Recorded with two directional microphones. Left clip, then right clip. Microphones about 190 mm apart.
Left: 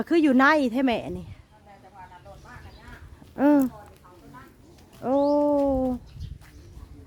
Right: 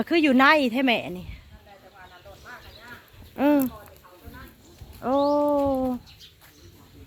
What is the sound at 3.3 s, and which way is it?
Speech, 30° left (ahead or behind).